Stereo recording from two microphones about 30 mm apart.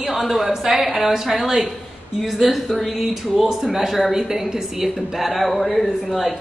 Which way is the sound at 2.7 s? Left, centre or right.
Centre.